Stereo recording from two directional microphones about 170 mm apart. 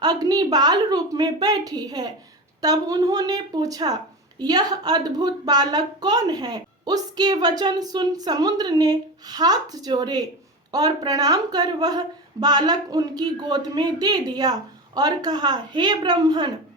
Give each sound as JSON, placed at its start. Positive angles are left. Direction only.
{"t": 0.0, "sound": "speech", "side_deg": -25}